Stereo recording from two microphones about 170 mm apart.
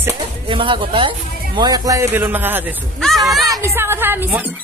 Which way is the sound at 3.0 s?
5° left (ahead or behind).